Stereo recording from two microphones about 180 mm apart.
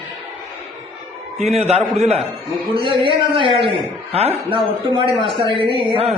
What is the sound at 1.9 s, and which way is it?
A man's voice, 35° right (ahead or behind).